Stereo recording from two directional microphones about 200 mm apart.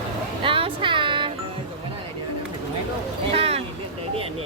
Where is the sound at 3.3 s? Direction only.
30° right (ahead or behind).